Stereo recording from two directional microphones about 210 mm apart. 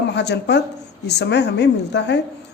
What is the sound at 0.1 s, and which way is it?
Speech, 55° left (ahead or behind).